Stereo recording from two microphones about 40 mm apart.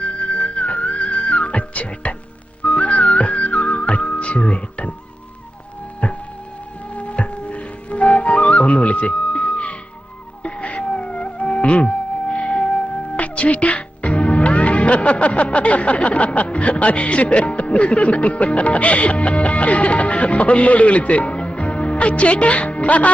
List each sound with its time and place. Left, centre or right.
0.0 s music: left
6.0 s music: left